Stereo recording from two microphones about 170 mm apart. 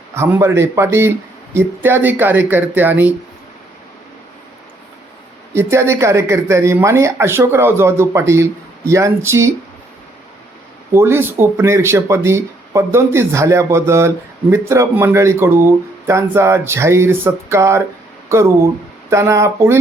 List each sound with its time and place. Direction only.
0.1 s speech: 15° right (ahead or behind)
5.5 s speech: 15° right (ahead or behind)
10.9 s speech: 15° right (ahead or behind)